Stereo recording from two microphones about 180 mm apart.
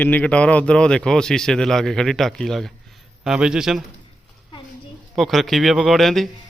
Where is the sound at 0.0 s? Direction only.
10° left (ahead or behind).